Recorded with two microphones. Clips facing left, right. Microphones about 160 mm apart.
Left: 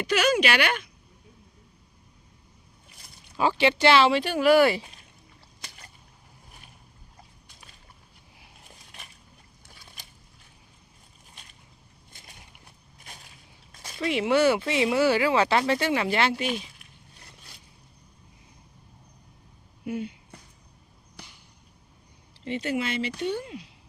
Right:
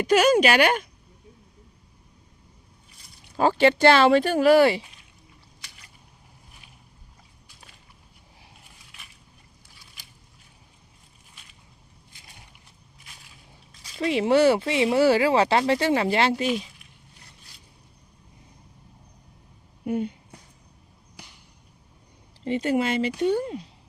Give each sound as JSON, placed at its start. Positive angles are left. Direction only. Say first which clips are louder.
{"t": 0.0, "sound": "speech", "louder": "right 5 dB", "side_deg": -40}
{"t": 3.3, "sound": "speech", "louder": "right 4 dB", "side_deg": -45}
{"t": 5.6, "sound": "a sound", "louder": "left 6 dB", "side_deg": 45}
{"t": 9.6, "sound": "boat", "louder": "left 6 dB", "side_deg": 50}
{"t": 13.1, "sound": "a sound", "louder": "left 5 dB", "side_deg": 45}
{"t": 14.0, "sound": "speech", "louder": "right 3 dB", "side_deg": -35}
{"t": 19.8, "sound": "speech", "louder": "right 5 dB", "side_deg": -50}
{"t": 22.4, "sound": "speech", "louder": "right 5 dB", "side_deg": -40}